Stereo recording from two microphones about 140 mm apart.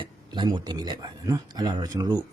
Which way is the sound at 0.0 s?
35° right (ahead or behind).